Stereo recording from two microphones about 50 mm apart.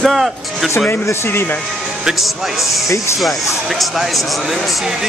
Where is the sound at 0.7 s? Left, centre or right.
Left.